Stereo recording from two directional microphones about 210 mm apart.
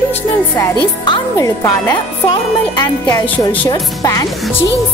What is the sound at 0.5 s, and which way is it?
Speech, 20° left (ahead or behind).